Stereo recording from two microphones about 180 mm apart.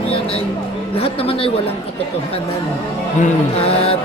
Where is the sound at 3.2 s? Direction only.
30° left (ahead or behind).